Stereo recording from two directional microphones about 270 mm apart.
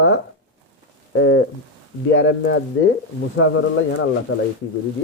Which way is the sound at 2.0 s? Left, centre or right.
Left.